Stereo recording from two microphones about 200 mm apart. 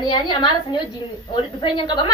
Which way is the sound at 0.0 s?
20° left (ahead or behind).